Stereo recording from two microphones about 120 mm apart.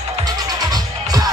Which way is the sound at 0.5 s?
35° right (ahead or behind).